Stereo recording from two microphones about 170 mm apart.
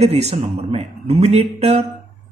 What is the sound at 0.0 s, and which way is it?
Speech, 40° right (ahead or behind).